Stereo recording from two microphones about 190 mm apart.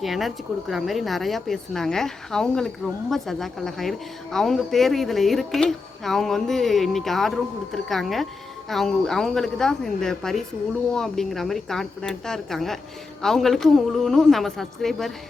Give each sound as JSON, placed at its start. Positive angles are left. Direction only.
{"t": 0.0, "sound": "a woman's voice", "side_deg": 0}